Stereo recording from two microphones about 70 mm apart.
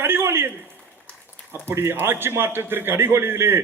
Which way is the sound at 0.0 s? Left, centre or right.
Right.